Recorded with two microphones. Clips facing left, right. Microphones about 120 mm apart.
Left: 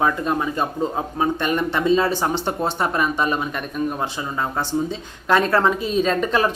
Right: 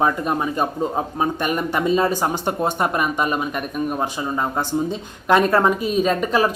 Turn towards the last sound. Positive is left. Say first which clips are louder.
# right 1 dB
turn(degrees=-10)  # may be behind; listen again after turning